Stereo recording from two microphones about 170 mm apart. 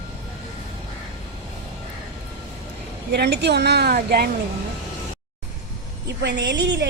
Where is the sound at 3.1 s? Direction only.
70° right (ahead or behind).